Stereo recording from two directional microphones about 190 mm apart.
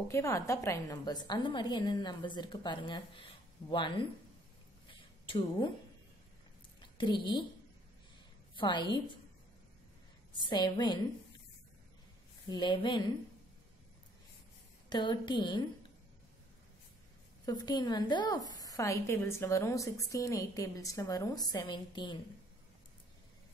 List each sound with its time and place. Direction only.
0.1 s a woman's voice: 15° left (ahead or behind)
5.2 s a woman's voice: 25° left (ahead or behind)
7.0 s a woman's voice: 25° left (ahead or behind)
8.5 s a woman's voice: 25° left (ahead or behind)
10.4 s a woman's voice: 20° left (ahead or behind)
12.4 s a woman's voice: 25° left (ahead or behind)
14.9 s a woman's voice: 25° left (ahead or behind)
17.5 s a woman's voice: 20° left (ahead or behind)